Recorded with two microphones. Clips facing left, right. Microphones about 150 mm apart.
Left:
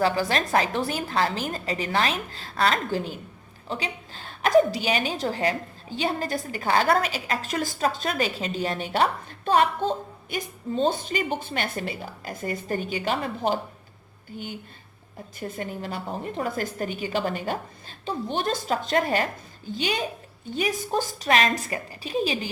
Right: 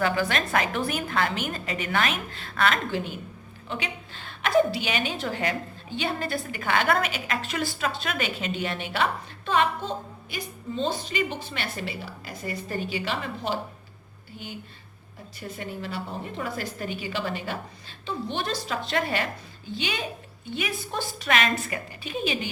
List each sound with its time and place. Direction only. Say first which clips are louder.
0.0 s a woman's voice: left 2 dB; 35° left (ahead or behind)
15.4 s a woman's voice: left 3 dB; 45° left (ahead or behind)